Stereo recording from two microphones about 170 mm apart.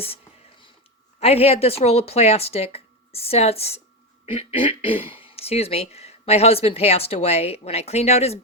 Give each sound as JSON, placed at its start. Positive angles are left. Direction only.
{"t": 1.2, "sound": "speech", "side_deg": 35}